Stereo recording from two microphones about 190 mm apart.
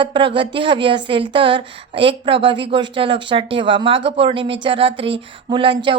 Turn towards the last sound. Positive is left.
turn(degrees=-25)  # may be behind; listen again after turning